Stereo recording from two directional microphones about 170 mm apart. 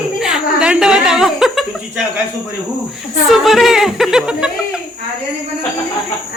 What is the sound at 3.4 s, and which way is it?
Speech, centre (ahead or behind).